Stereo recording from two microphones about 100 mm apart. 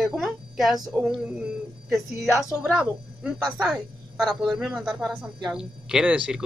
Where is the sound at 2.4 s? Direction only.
10° right (ahead or behind).